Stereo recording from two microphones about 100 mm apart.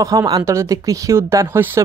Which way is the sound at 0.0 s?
35° right (ahead or behind).